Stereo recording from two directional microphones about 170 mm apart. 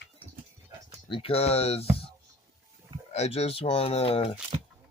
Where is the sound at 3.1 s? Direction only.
35° left (ahead or behind).